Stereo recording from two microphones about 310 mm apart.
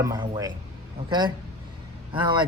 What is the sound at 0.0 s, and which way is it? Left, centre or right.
Speech, centre.